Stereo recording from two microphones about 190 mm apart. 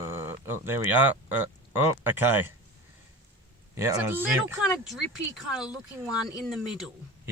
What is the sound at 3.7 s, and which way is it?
Speech, 15° right (ahead or behind).